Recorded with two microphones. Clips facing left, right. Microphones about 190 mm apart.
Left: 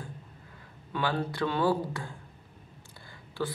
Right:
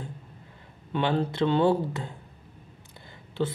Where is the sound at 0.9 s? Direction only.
25° right (ahead or behind).